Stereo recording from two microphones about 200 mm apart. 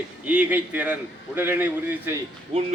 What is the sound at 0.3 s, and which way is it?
A man's voice, 5° right (ahead or behind).